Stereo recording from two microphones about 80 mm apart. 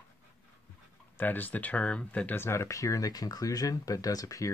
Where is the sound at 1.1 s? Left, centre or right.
Left.